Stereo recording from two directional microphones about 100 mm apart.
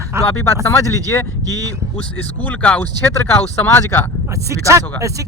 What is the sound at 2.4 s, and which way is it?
Speech, 15° left (ahead or behind).